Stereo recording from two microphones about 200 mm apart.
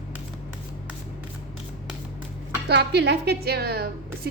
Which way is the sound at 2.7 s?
55° right (ahead or behind).